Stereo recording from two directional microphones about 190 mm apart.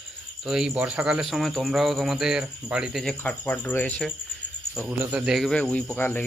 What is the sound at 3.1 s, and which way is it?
Speech, 10° left (ahead or behind).